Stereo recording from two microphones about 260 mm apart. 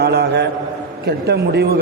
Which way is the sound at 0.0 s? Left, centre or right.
Right.